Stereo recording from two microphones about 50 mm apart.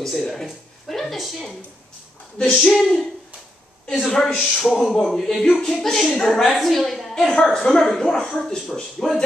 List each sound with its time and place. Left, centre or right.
0.0 s speech: centre
2.3 s speech: centre
2.7 s a woman's voice: centre